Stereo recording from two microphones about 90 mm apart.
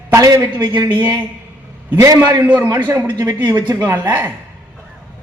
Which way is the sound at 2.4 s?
15° right (ahead or behind).